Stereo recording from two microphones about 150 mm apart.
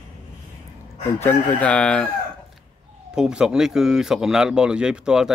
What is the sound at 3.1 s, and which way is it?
Speech, 5° right (ahead or behind).